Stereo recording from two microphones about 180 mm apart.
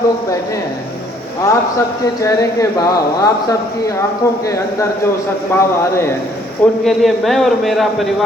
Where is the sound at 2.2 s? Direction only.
20° left (ahead or behind).